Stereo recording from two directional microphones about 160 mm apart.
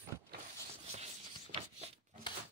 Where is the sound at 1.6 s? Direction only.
40° right (ahead or behind).